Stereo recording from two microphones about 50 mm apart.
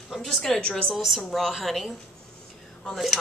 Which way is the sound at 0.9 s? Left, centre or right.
Centre.